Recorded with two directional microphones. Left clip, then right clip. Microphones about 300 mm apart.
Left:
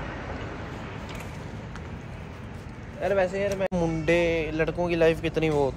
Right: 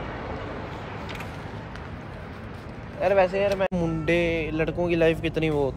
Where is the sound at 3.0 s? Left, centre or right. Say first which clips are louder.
Right 4 dB; centre.